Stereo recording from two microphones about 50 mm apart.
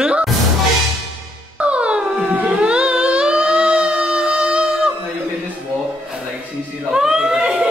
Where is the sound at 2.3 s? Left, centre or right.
Right.